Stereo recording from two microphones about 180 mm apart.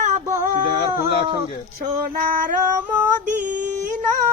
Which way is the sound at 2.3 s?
50° right (ahead or behind).